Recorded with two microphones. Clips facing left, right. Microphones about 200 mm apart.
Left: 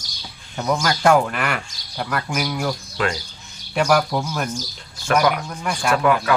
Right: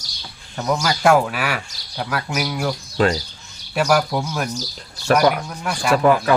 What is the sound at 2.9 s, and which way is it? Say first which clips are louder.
Speech: right 8 dB; 35° right (ahead or behind).